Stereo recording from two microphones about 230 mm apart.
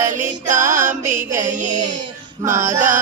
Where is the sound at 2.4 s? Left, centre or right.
Centre.